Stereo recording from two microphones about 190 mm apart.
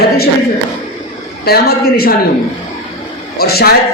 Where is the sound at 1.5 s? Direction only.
55° left (ahead or behind).